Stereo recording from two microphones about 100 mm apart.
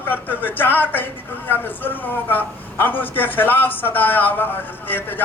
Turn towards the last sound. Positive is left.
turn(degrees=20)  # may be behind; listen again after turning